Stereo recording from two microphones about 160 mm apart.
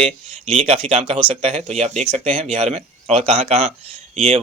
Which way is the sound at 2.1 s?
35° right (ahead or behind).